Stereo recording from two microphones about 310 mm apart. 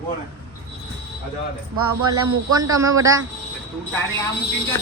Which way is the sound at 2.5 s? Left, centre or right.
Centre.